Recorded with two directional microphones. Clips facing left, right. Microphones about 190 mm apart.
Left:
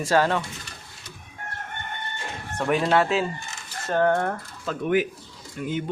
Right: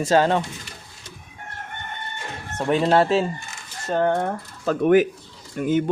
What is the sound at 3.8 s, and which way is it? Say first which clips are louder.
Speech: right 1 dB; 20° right (ahead or behind).